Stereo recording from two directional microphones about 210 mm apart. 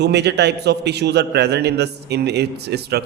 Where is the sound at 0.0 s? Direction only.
55° right (ahead or behind).